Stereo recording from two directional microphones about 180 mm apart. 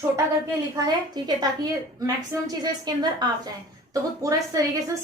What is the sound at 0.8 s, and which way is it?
A woman's voice, 20° right (ahead or behind).